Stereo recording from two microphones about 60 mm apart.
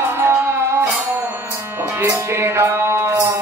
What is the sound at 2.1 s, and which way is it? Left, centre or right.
Music, right.